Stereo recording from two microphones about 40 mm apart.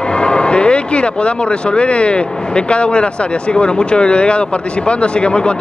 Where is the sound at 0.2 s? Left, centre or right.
Left.